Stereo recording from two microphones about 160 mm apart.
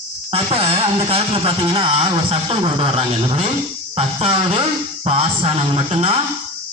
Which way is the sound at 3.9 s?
40° right (ahead or behind).